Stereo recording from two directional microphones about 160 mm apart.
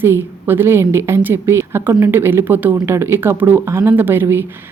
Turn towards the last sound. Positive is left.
turn(degrees=-15)  # may be behind; listen again after turning